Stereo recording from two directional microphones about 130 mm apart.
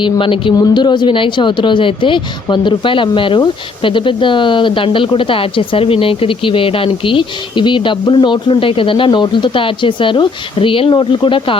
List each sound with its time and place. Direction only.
0.0 s speech: 40° left (ahead or behind)